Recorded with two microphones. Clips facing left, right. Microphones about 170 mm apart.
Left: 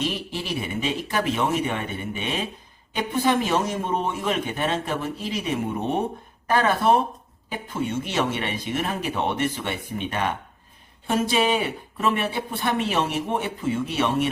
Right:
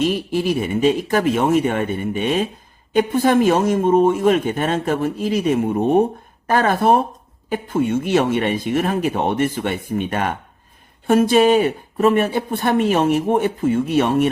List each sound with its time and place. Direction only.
0.0 s speech: 45° right (ahead or behind)